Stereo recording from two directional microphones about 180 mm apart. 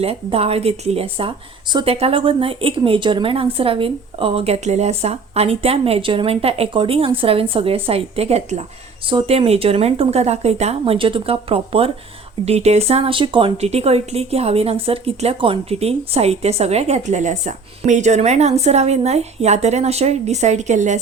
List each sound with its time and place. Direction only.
0.0 s speech: 35° right (ahead or behind)